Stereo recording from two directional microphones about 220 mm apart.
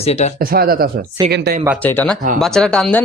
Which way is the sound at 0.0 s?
30° left (ahead or behind).